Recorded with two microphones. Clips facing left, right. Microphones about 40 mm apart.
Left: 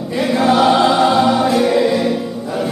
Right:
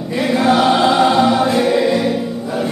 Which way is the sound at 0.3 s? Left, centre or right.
Centre.